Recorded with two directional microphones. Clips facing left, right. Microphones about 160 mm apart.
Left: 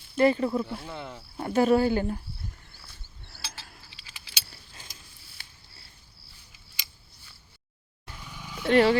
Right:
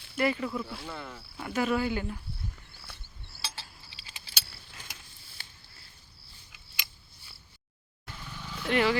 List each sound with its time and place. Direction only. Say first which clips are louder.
0.2 s speech: left 7 dB; 35° left (ahead or behind)
0.6 s speech: left 4 dB; 20° left (ahead or behind)
1.4 s speech: left 7 dB; 35° left (ahead or behind)
3.4 s a sound: right 2 dB; 30° right (ahead or behind)
4.9 s mechanisms: right 3 dB; 65° right (ahead or behind)
8.0 s vehicle: even; 10° left (ahead or behind)
8.7 s speech: left 6 dB; 35° left (ahead or behind)